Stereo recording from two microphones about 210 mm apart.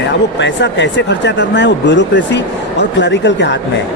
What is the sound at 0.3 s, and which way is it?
Speech, 55° left (ahead or behind).